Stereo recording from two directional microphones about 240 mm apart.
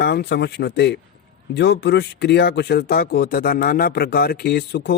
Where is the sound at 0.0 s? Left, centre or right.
Left.